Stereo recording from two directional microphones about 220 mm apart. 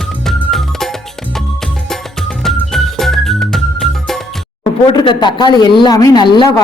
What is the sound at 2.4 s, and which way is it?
Music, centre (ahead or behind).